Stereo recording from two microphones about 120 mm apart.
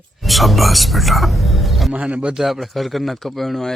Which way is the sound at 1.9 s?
10° right (ahead or behind).